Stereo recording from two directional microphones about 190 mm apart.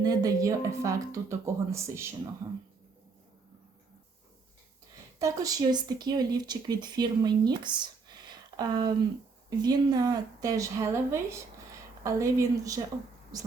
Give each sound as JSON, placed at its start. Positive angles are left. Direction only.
{"t": 0.0, "sound": "speech", "side_deg": -20}
{"t": 5.2, "sound": "speech", "side_deg": -20}